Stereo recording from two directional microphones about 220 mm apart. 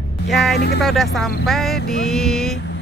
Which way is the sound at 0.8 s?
Centre (ahead or behind).